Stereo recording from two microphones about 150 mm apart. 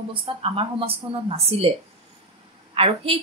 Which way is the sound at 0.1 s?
35° right (ahead or behind).